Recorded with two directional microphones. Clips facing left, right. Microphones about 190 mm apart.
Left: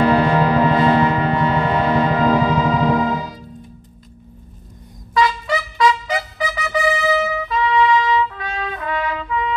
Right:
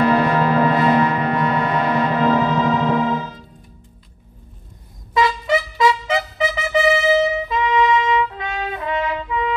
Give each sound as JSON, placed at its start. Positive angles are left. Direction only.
{"t": 0.0, "sound": "music", "side_deg": 30}
{"t": 2.2, "sound": "music", "side_deg": 10}
{"t": 5.1, "sound": "trumpet", "side_deg": -25}